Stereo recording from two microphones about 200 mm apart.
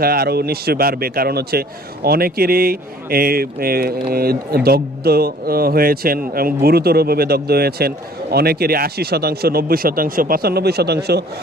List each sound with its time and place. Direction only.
0.0 s speech: 50° right (ahead or behind)